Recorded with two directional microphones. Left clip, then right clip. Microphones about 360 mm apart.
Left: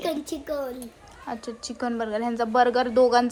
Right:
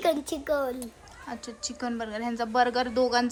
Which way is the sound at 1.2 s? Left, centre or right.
Centre.